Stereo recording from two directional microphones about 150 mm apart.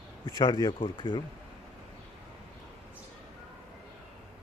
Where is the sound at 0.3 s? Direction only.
30° left (ahead or behind).